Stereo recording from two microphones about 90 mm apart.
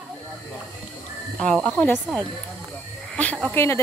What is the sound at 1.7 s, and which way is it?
Speech, 20° left (ahead or behind).